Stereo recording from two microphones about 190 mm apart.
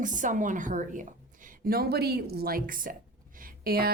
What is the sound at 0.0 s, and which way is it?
Speech, 45° right (ahead or behind).